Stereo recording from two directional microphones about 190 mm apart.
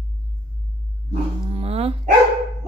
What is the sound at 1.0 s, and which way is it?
Dog, 35° right (ahead or behind).